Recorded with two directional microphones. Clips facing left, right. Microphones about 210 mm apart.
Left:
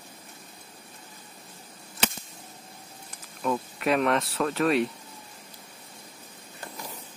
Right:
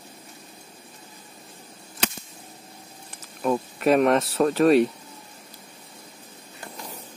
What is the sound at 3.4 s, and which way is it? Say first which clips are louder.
Speech: right 5 dB; 40° right (ahead or behind).